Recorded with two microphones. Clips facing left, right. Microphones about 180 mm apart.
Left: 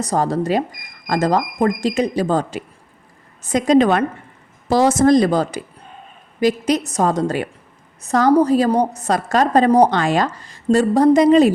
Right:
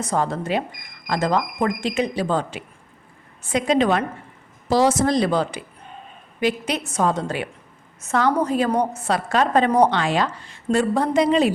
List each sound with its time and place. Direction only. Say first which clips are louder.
0.0 s a woman's voice: left 4 dB; 35° left (ahead or behind)